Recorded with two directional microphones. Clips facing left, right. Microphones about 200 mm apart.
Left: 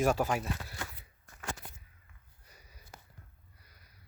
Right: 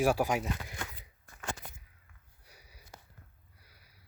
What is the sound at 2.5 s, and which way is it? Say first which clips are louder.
Sniff: right 1 dB; 10° right (ahead or behind).